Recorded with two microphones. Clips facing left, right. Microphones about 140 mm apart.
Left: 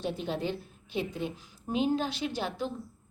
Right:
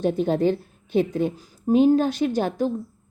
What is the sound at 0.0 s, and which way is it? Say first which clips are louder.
A woman's voice: right 12 dB; 50° right (ahead or behind).